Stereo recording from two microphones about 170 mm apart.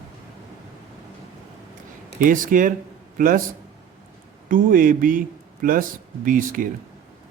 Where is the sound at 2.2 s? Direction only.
50° right (ahead or behind).